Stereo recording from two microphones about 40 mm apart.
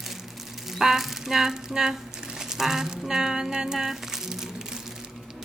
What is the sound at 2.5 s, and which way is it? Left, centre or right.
Speech, centre.